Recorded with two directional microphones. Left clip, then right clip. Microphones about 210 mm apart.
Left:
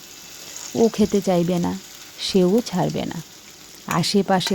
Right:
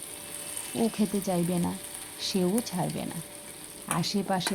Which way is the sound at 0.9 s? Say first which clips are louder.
Left 10 dB; 30° left (ahead or behind).